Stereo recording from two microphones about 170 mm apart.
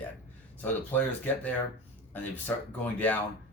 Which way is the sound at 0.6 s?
10° left (ahead or behind).